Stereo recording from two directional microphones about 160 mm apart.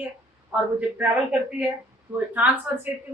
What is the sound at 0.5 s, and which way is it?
Speech, 10° right (ahead or behind).